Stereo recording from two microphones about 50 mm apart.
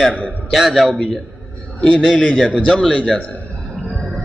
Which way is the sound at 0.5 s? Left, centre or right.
Centre.